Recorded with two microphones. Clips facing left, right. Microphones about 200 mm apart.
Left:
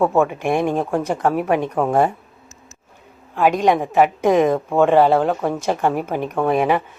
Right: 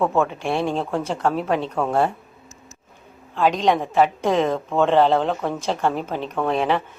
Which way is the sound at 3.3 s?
10° left (ahead or behind).